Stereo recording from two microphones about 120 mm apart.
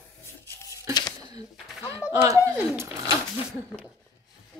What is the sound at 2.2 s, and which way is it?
Speech, 25° right (ahead or behind).